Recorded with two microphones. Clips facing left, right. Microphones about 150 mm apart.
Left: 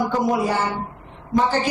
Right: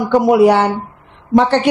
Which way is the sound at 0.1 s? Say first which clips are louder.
Right 11 dB; 75° right (ahead or behind).